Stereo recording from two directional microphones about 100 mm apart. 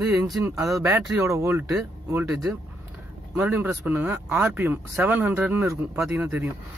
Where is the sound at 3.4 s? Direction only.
15° right (ahead or behind).